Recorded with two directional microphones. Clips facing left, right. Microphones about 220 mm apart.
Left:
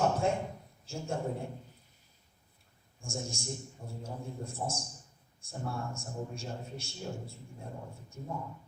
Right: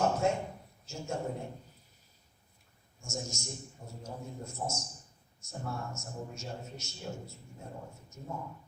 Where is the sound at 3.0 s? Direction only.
30° left (ahead or behind).